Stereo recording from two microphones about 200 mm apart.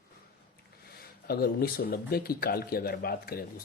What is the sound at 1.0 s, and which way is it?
Speech, 50° left (ahead or behind).